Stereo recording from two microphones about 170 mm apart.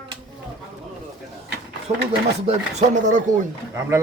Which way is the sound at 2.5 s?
45° right (ahead or behind).